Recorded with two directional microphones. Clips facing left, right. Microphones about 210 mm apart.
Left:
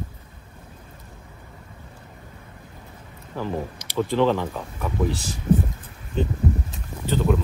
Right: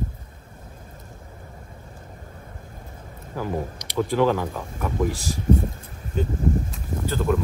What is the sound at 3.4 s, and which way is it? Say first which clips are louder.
Speech: even; 10° right (ahead or behind).